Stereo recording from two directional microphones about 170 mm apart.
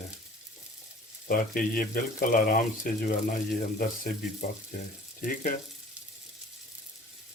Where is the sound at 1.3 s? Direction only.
60° left (ahead or behind).